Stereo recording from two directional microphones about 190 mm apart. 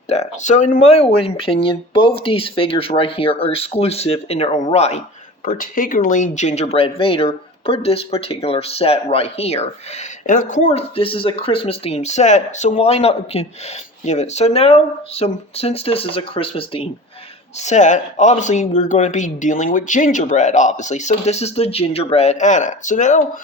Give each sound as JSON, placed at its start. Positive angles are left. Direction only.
{"t": 0.1, "sound": "speech", "side_deg": 40}
{"t": 5.5, "sound": "speech", "side_deg": 45}
{"t": 10.2, "sound": "speech", "side_deg": 45}